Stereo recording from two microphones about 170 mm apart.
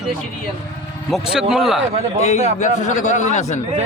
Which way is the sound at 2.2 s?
45° left (ahead or behind).